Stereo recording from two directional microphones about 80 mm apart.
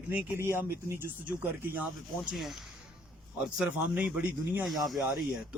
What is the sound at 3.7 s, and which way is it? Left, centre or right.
Speech, centre.